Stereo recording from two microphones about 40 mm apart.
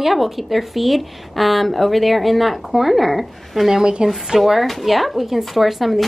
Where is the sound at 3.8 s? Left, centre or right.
Centre.